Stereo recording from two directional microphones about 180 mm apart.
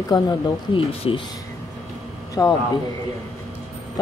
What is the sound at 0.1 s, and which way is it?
Speech, 25° left (ahead or behind).